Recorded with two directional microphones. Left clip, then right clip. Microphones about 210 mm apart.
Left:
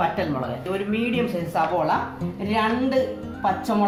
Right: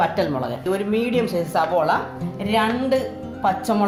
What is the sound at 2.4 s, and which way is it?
Speech, 35° right (ahead or behind).